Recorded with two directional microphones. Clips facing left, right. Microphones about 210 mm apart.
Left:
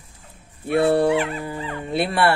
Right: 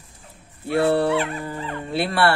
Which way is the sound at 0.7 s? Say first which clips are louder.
Left 2 dB; 15° left (ahead or behind).